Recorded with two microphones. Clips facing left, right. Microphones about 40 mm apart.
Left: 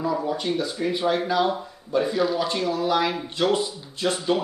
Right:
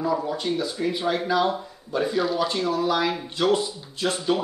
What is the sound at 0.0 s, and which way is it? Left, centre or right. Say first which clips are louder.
Speech: even; centre.